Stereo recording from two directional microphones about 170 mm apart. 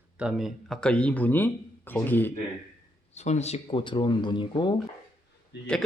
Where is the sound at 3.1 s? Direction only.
40° left (ahead or behind).